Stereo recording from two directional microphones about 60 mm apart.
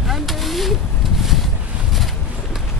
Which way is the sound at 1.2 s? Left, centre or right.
Centre.